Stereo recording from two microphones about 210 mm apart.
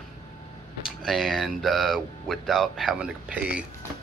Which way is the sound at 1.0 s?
Centre (ahead or behind).